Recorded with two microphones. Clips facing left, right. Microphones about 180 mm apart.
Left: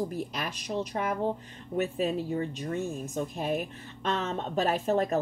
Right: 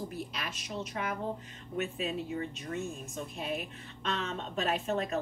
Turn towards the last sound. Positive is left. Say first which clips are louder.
# left 5 dB
turn(degrees=40)  # may be behind; listen again after turning